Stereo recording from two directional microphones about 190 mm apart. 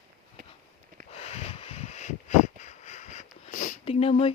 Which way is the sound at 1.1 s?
35° left (ahead or behind).